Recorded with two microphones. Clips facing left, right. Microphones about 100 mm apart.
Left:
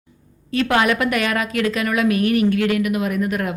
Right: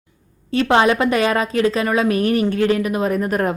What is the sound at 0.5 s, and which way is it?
A woman's voice, 30° right (ahead or behind).